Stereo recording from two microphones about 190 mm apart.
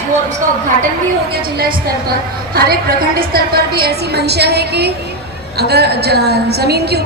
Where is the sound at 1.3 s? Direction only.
55° right (ahead or behind).